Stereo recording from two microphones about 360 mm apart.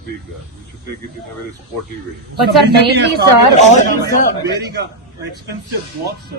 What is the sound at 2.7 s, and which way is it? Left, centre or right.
Speech, right.